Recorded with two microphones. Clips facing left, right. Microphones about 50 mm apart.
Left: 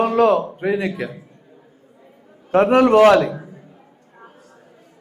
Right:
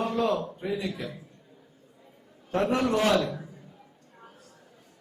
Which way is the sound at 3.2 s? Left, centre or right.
Left.